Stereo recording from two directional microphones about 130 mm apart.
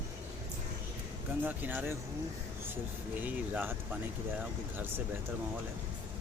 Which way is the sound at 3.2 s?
10° right (ahead or behind).